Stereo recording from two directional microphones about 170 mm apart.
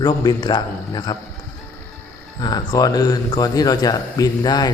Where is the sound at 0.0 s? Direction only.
25° left (ahead or behind).